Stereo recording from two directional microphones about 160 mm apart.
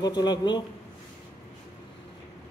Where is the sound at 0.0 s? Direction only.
25° left (ahead or behind).